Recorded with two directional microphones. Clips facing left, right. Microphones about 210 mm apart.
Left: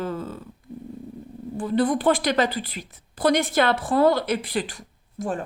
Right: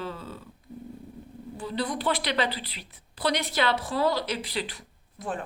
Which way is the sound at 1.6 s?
50° left (ahead or behind).